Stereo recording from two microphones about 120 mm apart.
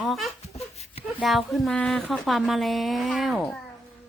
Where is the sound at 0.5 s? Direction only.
55° left (ahead or behind).